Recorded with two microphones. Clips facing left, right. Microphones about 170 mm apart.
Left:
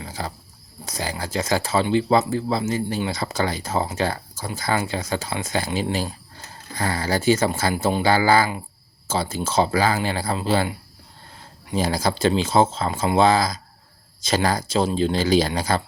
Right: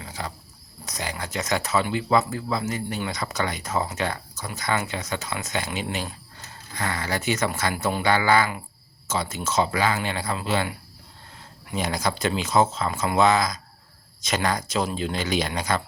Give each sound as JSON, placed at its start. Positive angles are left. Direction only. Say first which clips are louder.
{"t": 0.0, "sound": "cricket", "louder": "left 3 dB", "side_deg": 35}
{"t": 0.9, "sound": "speech", "louder": "left 3 dB", "side_deg": 30}